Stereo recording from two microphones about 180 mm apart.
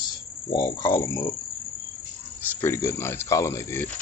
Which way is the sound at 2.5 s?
15° left (ahead or behind).